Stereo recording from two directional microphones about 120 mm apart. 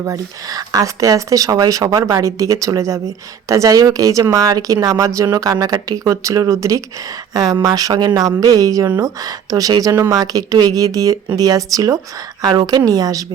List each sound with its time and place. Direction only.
0.0 s speech: 30° right (ahead or behind)